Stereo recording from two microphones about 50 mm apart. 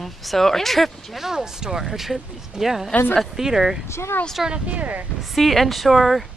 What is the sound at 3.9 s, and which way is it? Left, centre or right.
Speech, left.